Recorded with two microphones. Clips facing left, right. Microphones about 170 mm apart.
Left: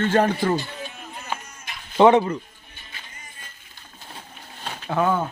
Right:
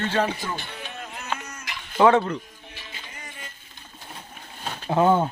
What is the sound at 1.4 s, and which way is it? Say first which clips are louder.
Sheep: right 3 dB; 75° right (ahead or behind).